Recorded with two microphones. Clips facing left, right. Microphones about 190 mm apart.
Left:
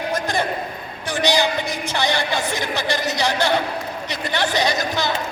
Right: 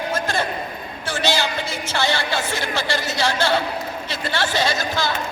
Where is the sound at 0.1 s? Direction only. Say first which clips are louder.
Left 1 dB; 15° left (ahead or behind).